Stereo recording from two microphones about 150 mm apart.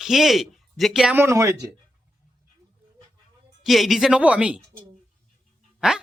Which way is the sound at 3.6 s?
Centre (ahead or behind).